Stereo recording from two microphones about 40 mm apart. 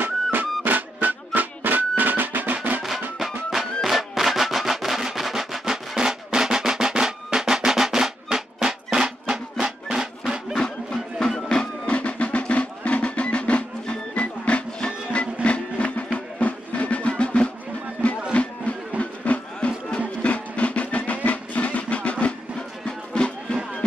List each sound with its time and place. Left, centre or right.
0.0 s music: right
3.4 s music: centre
10.6 s music: centre
11.8 s music: left
18.0 s music: right
18.3 s music: left